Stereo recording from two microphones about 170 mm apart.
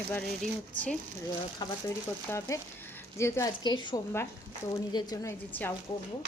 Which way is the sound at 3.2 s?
15° left (ahead or behind).